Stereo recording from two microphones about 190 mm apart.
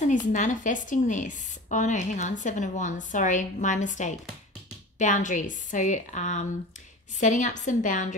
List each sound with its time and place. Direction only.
0.0 s a woman's voice: 40° left (ahead or behind)